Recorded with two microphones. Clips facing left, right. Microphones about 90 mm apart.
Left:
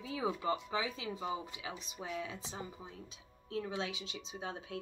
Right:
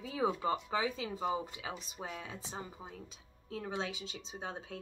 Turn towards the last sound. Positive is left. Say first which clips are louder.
# even
turn(degrees=-35)  # may be behind; listen again after turning